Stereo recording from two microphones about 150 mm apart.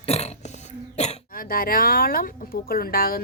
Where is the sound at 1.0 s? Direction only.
45° left (ahead or behind).